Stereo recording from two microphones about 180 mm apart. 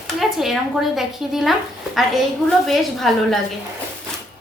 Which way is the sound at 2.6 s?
Centre (ahead or behind).